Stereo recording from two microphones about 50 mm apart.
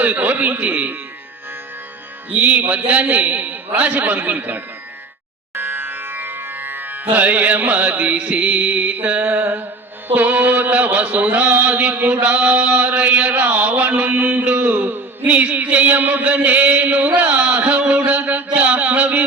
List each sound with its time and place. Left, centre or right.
0.0 s music: right
2.3 s music: right
10.1 s a sound: right